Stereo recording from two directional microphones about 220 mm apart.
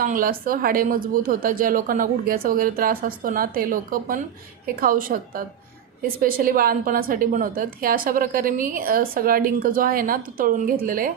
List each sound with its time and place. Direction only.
0.0 s a woman's voice: 40° right (ahead or behind)